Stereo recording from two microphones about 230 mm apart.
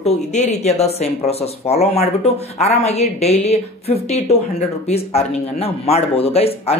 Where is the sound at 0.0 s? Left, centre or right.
Left.